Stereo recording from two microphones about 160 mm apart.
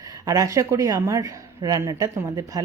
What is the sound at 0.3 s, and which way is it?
A woman's voice, 20° right (ahead or behind).